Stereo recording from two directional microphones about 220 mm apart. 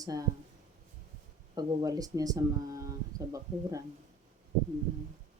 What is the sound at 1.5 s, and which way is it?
Speech, 15° right (ahead or behind).